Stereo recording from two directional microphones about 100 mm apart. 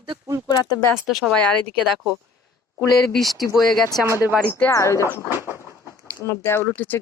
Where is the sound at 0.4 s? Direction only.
40° left (ahead or behind).